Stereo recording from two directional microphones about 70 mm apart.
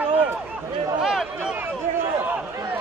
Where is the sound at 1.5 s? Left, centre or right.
Right.